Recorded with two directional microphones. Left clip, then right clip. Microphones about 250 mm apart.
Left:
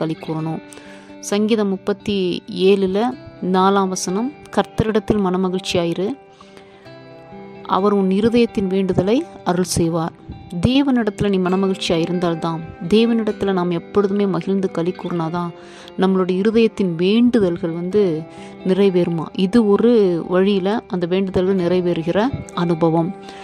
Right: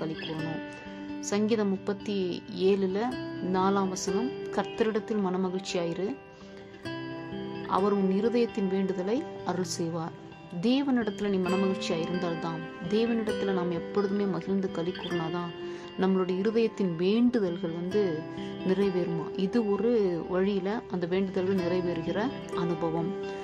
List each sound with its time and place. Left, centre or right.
1.2 s a woman's voice: left
7.6 s a woman's voice: left